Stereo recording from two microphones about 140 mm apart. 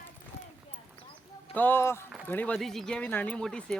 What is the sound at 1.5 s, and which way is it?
Speech, 15° left (ahead or behind).